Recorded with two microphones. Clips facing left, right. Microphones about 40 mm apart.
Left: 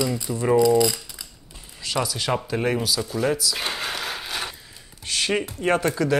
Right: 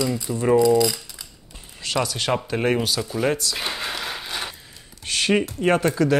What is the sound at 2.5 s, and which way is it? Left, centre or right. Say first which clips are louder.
Speech: right 3 dB; centre.